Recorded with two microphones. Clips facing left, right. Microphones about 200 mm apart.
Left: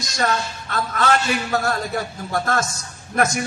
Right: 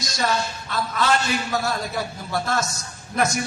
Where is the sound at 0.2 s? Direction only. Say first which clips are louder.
Left 2 dB; 50° left (ahead or behind).